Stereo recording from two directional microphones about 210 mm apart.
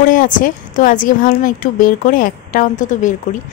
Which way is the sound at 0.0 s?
40° left (ahead or behind).